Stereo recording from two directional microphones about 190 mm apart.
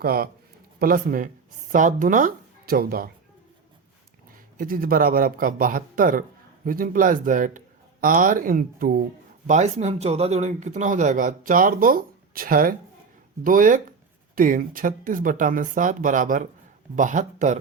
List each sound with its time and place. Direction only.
0.0 s speech: 50° right (ahead or behind)
4.5 s speech: 45° right (ahead or behind)